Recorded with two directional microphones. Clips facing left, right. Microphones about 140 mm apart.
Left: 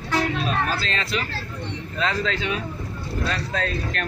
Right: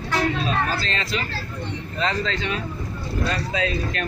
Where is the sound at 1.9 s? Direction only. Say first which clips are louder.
Even; 5° left (ahead or behind).